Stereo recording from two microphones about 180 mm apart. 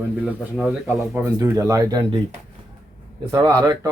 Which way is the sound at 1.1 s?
15° right (ahead or behind).